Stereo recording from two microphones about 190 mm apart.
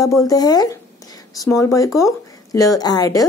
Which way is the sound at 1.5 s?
15° left (ahead or behind).